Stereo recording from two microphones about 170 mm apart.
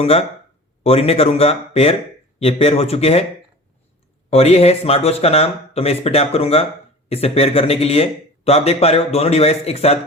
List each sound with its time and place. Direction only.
0.0 s a man's voice: 35° left (ahead or behind)
4.3 s a man's voice: 35° left (ahead or behind)